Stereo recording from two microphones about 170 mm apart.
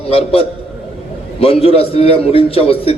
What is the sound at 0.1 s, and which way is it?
A man's voice, 35° left (ahead or behind).